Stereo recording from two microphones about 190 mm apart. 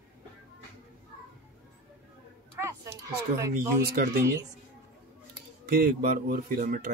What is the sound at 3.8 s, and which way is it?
Speech, 55° right (ahead or behind).